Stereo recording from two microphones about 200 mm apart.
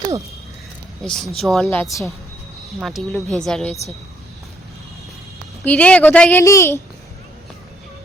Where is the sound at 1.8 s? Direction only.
15° left (ahead or behind).